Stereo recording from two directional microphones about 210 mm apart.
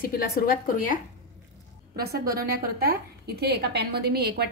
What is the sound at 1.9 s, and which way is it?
A woman's voice, 50° right (ahead or behind).